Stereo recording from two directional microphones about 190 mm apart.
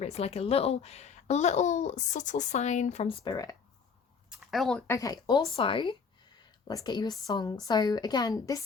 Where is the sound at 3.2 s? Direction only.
20° left (ahead or behind).